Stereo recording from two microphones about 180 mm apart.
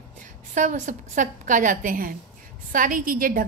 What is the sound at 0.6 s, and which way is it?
A woman's voice, 45° right (ahead or behind).